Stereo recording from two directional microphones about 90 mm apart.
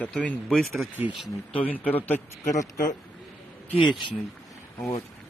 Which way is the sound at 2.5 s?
40° left (ahead or behind).